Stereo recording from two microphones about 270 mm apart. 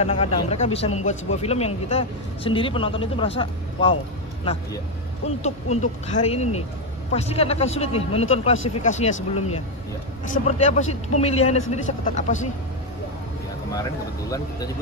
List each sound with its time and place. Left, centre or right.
0.0 s a man's voice: left
5.4 s a man's voice: left